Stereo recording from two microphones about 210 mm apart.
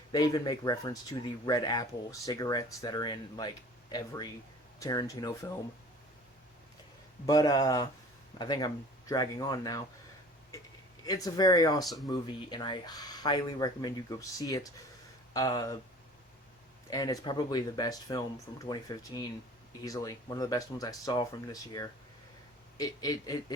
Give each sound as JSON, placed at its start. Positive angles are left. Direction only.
{"t": 0.1, "sound": "speech", "side_deg": 15}
{"t": 7.3, "sound": "speech", "side_deg": 15}
{"t": 11.0, "sound": "speech", "side_deg": 20}
{"t": 16.9, "sound": "speech", "side_deg": 15}